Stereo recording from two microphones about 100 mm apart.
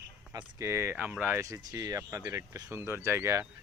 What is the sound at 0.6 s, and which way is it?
Speech, 25° right (ahead or behind).